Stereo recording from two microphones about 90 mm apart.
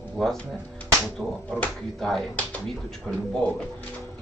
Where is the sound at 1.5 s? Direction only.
15° left (ahead or behind).